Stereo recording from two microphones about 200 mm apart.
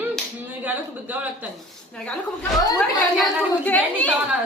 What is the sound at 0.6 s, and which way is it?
Speech, 10° right (ahead or behind).